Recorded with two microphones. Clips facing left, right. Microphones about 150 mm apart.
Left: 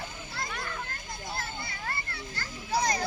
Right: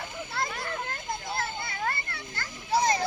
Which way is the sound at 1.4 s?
60° right (ahead or behind).